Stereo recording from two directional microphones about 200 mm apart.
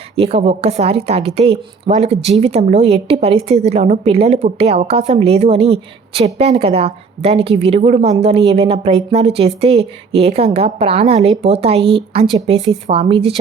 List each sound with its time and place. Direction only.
0.2 s a woman's voice: 30° right (ahead or behind)